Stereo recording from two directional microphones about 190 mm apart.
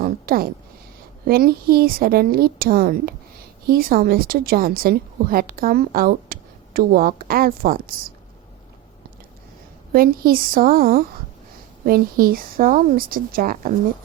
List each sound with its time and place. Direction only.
0.0 s a sound: 50° right (ahead or behind)
1.3 s a woman's voice: 50° right (ahead or behind)
9.9 s a woman's voice: 50° right (ahead or behind)